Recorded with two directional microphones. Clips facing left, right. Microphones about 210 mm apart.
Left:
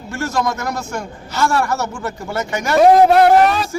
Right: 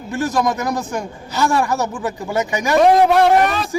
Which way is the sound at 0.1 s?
15° right (ahead or behind).